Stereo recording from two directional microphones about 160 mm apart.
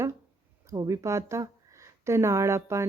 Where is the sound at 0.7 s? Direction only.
20° right (ahead or behind).